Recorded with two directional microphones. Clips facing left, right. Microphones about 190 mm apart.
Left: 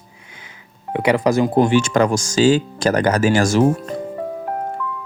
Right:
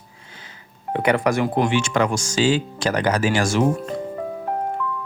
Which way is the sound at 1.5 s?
40° left (ahead or behind).